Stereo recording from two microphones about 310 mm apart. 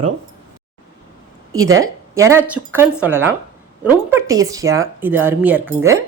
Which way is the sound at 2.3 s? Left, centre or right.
Centre.